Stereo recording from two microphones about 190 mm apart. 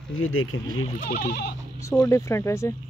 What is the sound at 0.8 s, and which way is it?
Speech, 45° left (ahead or behind).